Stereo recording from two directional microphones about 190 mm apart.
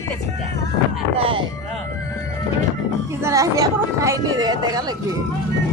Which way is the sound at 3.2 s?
15° right (ahead or behind).